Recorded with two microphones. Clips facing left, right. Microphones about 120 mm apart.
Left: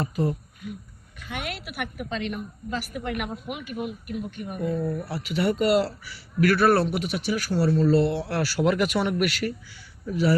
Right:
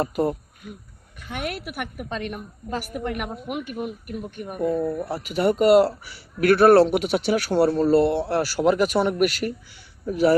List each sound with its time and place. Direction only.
0.0 s a woman's voice: 55° right (ahead or behind)
4.8 s speech: 30° right (ahead or behind)
5.0 s a woman's voice: 50° right (ahead or behind)
6.8 s speech: 65° right (ahead or behind)
7.7 s a woman's voice: 50° right (ahead or behind)